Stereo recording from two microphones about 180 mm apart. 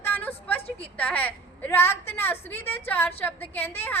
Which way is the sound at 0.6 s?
30° left (ahead or behind).